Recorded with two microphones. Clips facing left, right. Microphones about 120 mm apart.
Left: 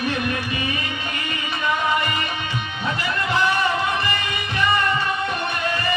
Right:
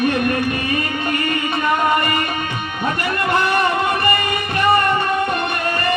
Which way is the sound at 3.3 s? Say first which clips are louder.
Right 3 dB; 55° right (ahead or behind).